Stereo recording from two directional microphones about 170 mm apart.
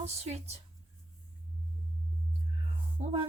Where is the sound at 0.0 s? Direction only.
40° right (ahead or behind).